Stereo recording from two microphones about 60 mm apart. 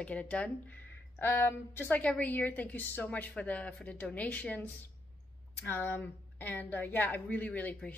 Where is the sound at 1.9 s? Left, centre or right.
Left.